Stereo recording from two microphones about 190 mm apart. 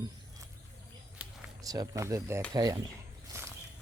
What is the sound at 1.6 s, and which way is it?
Speech, 20° right (ahead or behind).